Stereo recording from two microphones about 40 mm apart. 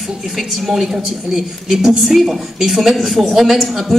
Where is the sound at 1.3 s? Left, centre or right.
Centre.